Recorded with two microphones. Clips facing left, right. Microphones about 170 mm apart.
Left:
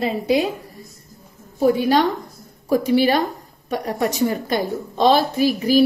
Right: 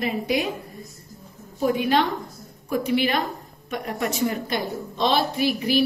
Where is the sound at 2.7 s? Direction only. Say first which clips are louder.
Left 6 dB; 40° left (ahead or behind).